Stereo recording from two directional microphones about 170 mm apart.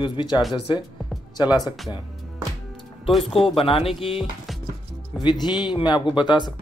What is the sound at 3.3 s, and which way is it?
Speech, 30° left (ahead or behind).